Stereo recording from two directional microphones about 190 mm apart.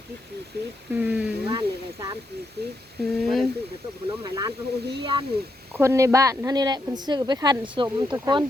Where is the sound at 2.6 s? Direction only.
60° right (ahead or behind).